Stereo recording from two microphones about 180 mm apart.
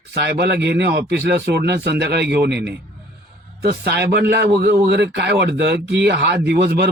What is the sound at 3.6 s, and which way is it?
A man's voice, 65° right (ahead or behind).